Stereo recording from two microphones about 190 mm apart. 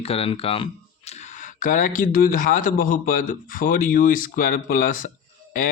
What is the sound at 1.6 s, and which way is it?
Speech, 45° left (ahead or behind).